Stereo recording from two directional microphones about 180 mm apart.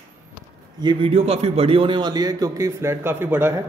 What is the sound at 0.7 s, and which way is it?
A man's voice, 25° right (ahead or behind).